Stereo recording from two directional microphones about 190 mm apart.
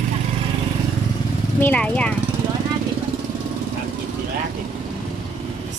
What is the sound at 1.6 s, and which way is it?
Speech, 10° left (ahead or behind).